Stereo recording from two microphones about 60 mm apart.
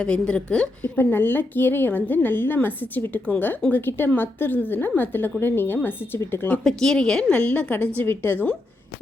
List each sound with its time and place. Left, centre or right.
0.0 s a woman's voice: centre
0.8 s a woman's voice: left
6.7 s a woman's voice: centre
7.3 s a woman's voice: left
8.0 s a woman's voice: left